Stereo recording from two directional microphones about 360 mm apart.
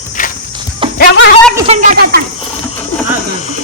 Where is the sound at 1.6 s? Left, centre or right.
Right.